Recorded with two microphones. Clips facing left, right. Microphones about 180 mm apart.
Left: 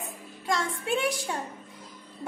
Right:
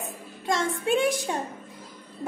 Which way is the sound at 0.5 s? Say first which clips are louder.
Right 4 dB; 20° right (ahead or behind).